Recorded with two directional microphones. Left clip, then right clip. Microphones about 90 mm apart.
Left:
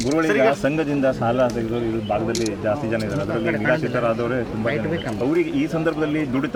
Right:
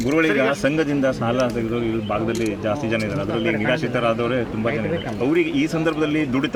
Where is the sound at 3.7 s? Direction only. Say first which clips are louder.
Even; 35° right (ahead or behind).